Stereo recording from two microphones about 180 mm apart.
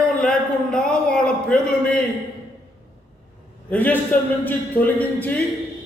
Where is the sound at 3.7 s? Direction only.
10° left (ahead or behind).